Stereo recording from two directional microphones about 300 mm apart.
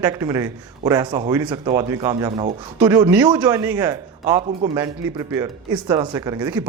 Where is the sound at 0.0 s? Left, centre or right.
Centre.